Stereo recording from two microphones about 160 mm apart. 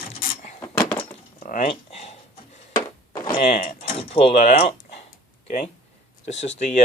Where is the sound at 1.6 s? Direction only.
40° left (ahead or behind).